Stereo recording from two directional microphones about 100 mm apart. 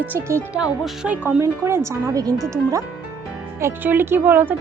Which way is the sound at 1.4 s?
25° right (ahead or behind).